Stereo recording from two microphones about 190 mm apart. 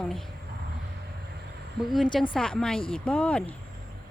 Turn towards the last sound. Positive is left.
turn(degrees=5)  # may be behind; listen again after turning